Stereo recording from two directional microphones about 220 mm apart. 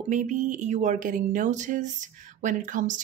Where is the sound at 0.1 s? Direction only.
35° right (ahead or behind).